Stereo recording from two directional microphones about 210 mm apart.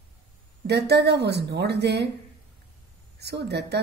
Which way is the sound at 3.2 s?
55° right (ahead or behind).